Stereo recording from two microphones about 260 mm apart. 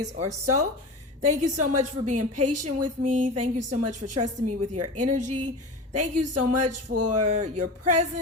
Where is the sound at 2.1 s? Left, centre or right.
Right.